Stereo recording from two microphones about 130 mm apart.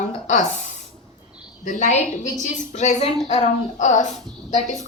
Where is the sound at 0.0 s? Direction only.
70° left (ahead or behind).